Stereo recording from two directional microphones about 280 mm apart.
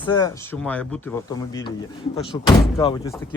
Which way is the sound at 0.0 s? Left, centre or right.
Centre.